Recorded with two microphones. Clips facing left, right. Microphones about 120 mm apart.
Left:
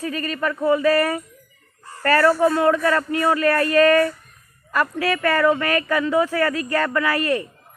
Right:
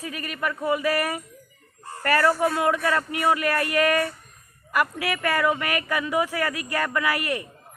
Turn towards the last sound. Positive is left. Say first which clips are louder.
# left 5 dB
turn(degrees=-15)  # may be behind; listen again after turning